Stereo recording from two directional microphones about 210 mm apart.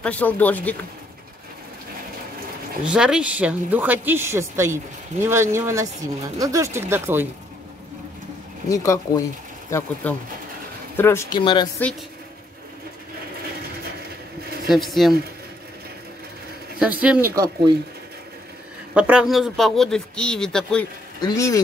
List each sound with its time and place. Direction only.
0.0 s speech: 5° left (ahead or behind)
2.8 s speech: 5° right (ahead or behind)
8.6 s speech: 15° left (ahead or behind)
14.7 s speech: centre (ahead or behind)
16.8 s speech: 5° right (ahead or behind)
18.9 s speech: 5° right (ahead or behind)
21.2 s speech: 15° left (ahead or behind)